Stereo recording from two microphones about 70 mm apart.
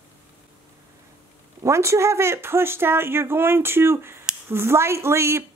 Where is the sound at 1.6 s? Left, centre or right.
Right.